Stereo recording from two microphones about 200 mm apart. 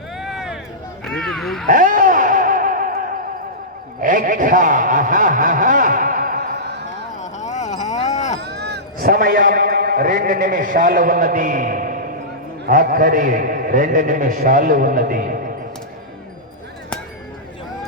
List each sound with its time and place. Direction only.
0.2 s a sound: centre (ahead or behind)
1.0 s speech: 5° left (ahead or behind)
1.6 s music: 40° right (ahead or behind)
4.0 s speech: 40° right (ahead or behind)
7.2 s a sound: 35° left (ahead or behind)
8.4 s a man's voice: 55° right (ahead or behind)